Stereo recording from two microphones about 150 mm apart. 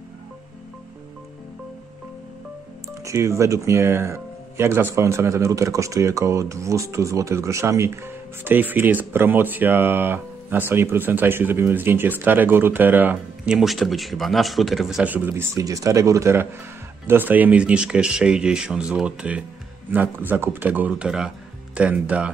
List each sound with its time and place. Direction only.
2.9 s speech: 20° right (ahead or behind)